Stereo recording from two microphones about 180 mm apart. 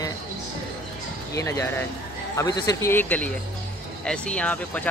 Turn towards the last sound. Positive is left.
turn(degrees=10)  # may be behind; listen again after turning